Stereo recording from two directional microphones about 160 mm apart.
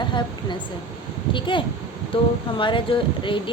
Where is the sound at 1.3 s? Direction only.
30° left (ahead or behind).